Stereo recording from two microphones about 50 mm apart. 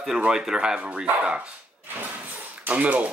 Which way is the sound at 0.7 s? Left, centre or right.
Right.